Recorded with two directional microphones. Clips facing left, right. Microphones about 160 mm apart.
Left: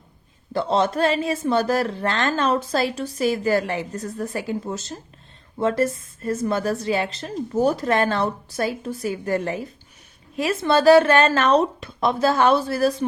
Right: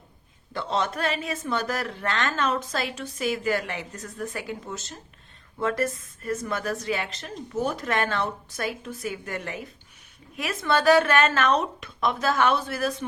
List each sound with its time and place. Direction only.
0.5 s speech: 35° left (ahead or behind)